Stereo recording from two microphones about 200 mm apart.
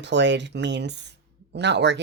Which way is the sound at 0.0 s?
60° right (ahead or behind).